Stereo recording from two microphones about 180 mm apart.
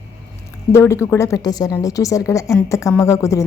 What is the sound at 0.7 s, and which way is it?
Speech, 15° left (ahead or behind).